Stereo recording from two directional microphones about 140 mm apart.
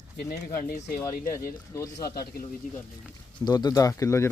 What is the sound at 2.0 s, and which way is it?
Speech, 90° left.